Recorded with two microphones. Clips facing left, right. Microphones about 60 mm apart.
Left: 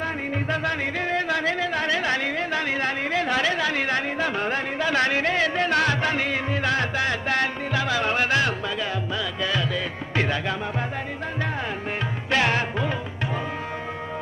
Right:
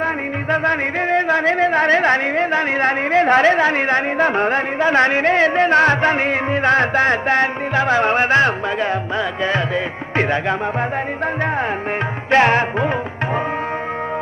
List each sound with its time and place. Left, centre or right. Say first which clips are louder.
0.0 s music: right 6 dB; right
12.3 s music: right 9 dB; right